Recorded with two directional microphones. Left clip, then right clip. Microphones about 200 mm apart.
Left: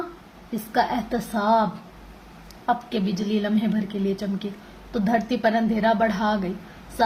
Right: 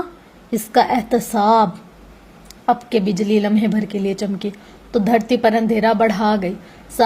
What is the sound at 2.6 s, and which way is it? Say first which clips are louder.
A woman's voice: right 7 dB; 45° right (ahead or behind).